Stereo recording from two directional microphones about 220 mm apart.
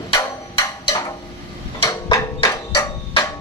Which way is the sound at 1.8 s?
15° left (ahead or behind).